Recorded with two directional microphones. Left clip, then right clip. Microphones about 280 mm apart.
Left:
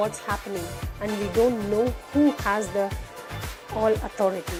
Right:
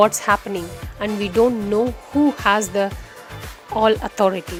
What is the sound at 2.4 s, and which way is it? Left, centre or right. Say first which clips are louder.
Speech: right 7 dB; right.